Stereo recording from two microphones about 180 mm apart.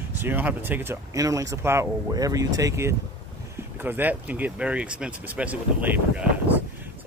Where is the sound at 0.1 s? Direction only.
10° right (ahead or behind).